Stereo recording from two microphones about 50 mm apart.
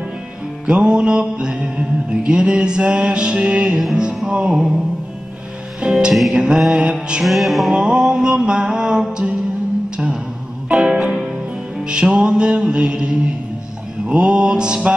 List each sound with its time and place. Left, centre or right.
0.7 s music: right
4.2 s mantra: centre
5.8 s speech: centre
6.3 s music: centre
7.2 s music: centre
7.7 s music: right
8.0 s mantra: centre
10.7 s music: centre